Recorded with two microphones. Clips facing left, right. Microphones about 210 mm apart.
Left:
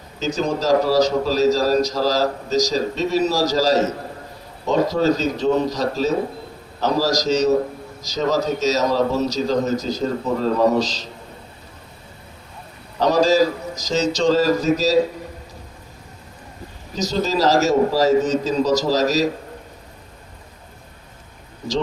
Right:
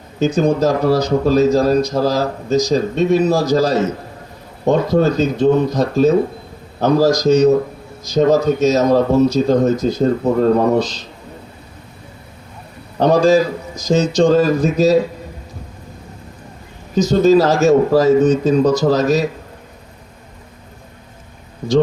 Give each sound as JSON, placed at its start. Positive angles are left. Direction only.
{"t": 0.2, "sound": "a man's voice", "side_deg": -55}
{"t": 13.0, "sound": "a man's voice", "side_deg": -55}
{"t": 16.9, "sound": "a man's voice", "side_deg": -55}